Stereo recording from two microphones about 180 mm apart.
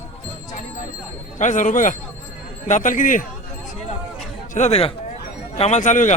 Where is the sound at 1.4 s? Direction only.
45° left (ahead or behind).